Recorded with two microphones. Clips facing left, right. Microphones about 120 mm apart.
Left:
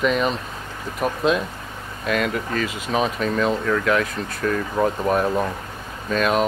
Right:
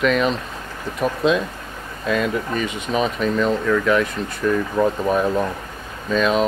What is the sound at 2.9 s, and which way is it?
Speech, centre (ahead or behind).